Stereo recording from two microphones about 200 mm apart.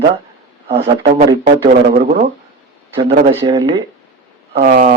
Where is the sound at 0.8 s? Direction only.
30° right (ahead or behind).